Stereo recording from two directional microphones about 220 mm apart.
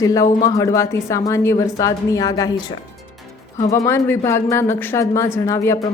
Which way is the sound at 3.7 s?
15° left (ahead or behind).